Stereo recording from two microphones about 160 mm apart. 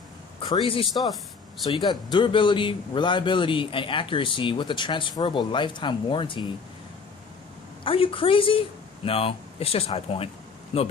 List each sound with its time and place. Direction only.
0.4 s speech: 30° left (ahead or behind)
7.9 s speech: 35° left (ahead or behind)